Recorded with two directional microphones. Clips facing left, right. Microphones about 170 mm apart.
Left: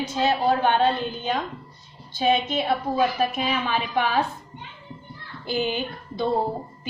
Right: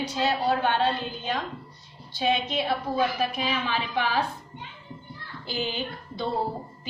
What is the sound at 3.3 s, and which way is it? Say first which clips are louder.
Speech: left 3 dB; 45° left (ahead or behind).